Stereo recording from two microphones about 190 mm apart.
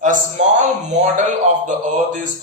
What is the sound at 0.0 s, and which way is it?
Speech, 40° right (ahead or behind).